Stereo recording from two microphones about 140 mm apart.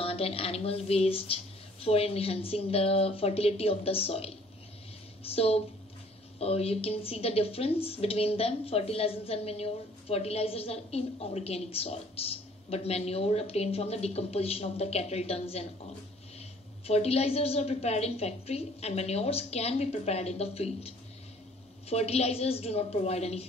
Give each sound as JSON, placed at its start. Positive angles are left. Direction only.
{"t": 0.0, "sound": "a woman's voice", "side_deg": 45}